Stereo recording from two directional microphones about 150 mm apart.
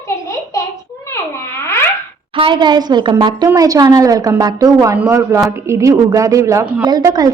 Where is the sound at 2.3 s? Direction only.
35° right (ahead or behind).